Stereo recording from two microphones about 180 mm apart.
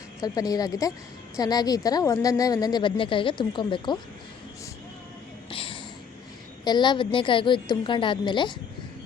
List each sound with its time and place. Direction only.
0.2 s a woman's voice: 20° left (ahead or behind)
5.5 s a sound: 30° left (ahead or behind)
6.7 s a woman's voice: 25° left (ahead or behind)